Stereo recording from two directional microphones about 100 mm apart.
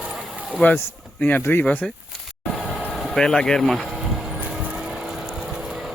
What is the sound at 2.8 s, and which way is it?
Speech, 5° left (ahead or behind).